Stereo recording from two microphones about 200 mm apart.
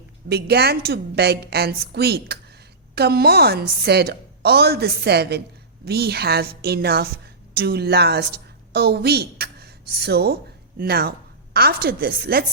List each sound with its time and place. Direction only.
0.3 s a woman's voice: 55° right (ahead or behind)